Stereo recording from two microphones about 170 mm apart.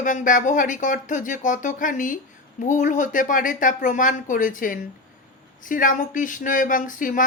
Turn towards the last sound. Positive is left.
turn(degrees=50)  # may be behind; listen again after turning